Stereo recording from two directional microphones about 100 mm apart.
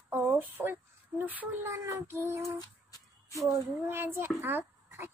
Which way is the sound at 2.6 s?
40° left (ahead or behind).